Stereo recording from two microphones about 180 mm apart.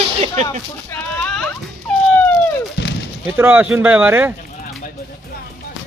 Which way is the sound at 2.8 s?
65° left (ahead or behind).